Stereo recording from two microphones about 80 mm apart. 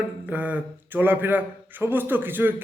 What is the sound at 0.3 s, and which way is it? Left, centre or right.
A man's voice, right.